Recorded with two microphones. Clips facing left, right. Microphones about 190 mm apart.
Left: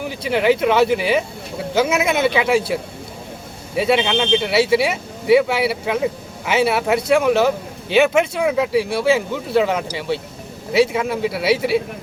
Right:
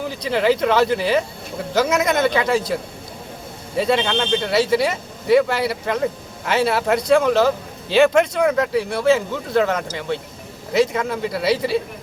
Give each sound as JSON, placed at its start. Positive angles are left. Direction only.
{"t": 0.3, "sound": "speech", "side_deg": 5}
{"t": 3.8, "sound": "speech", "side_deg": 5}
{"t": 11.5, "sound": "a man's voice", "side_deg": 70}